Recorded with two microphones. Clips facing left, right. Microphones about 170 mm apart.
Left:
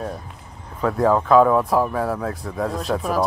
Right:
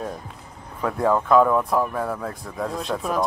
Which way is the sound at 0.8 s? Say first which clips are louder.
Left 3 dB; centre (ahead or behind).